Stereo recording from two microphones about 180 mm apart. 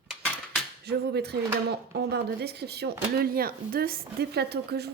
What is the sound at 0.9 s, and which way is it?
Speech, 65° right (ahead or behind).